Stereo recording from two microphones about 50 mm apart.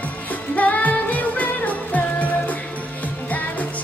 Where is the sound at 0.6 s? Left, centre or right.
Left.